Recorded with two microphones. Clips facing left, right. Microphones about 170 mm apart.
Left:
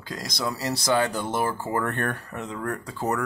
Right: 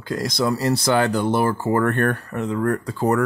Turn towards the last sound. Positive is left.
turn(degrees=-55)  # may be behind; listen again after turning